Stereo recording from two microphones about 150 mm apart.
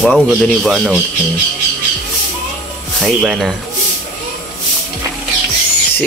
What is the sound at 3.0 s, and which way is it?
Speech, 5° right (ahead or behind).